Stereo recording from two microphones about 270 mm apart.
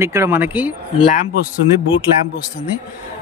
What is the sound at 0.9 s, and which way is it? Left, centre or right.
Speech, left.